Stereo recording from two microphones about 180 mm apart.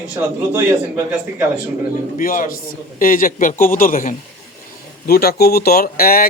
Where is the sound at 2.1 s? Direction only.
50° left (ahead or behind).